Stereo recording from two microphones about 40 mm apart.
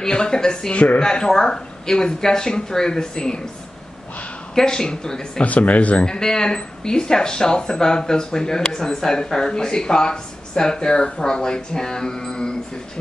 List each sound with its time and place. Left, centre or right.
0.0 s speech: centre
4.6 s speech: centre
5.4 s speech: left
6.0 s speech: centre